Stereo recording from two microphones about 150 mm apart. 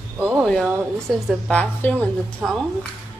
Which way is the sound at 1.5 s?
5° left (ahead or behind).